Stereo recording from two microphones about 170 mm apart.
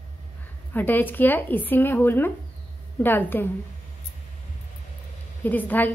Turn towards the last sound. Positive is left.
turn(degrees=10)  # may be behind; listen again after turning